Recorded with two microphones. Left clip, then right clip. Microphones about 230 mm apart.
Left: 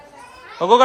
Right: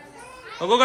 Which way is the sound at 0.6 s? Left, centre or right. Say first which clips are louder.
Left 6 dB; left.